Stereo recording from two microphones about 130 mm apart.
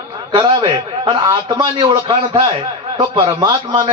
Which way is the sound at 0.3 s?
35° right (ahead or behind).